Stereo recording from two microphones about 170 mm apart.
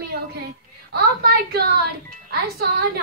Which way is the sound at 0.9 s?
70° right (ahead or behind).